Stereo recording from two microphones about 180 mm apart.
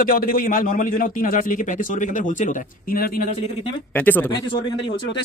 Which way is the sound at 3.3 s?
35° left (ahead or behind).